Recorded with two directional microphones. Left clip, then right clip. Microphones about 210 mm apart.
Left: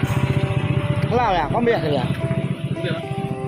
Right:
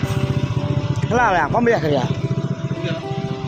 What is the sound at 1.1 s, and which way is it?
Speech, 15° right (ahead or behind).